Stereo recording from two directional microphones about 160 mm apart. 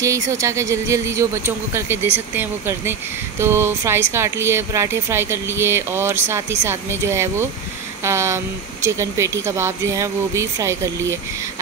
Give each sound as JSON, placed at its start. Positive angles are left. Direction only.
{"t": 0.0, "sound": "speech", "side_deg": -20}